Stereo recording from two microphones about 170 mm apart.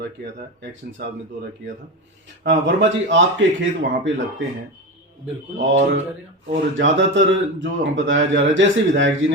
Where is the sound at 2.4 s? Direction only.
90° right.